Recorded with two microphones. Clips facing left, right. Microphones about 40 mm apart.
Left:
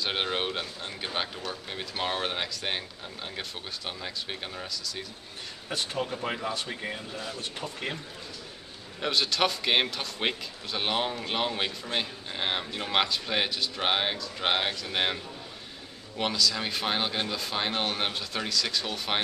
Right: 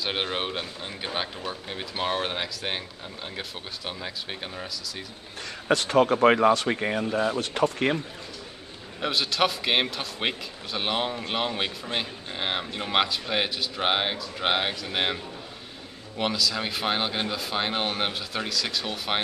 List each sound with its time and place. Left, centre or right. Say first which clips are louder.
0.0 s a man's voice: right 1 dB; centre
5.7 s speech: right 11 dB; right
9.0 s a man's voice: right 2 dB; centre